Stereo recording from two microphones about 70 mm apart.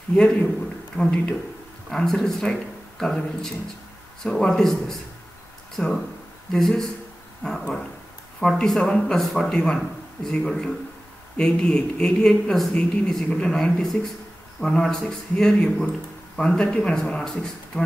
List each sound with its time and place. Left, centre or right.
0.1 s speech: centre
5.8 s speech: left
6.5 s speech: centre
7.4 s speech: centre
8.4 s a man's voice: centre